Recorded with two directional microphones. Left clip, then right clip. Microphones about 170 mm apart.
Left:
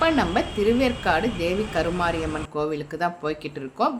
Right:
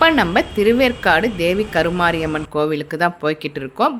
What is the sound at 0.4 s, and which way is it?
Speech, 30° right (ahead or behind).